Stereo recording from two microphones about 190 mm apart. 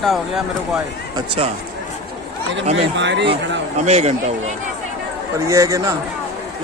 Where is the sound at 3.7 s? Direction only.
35° right (ahead or behind).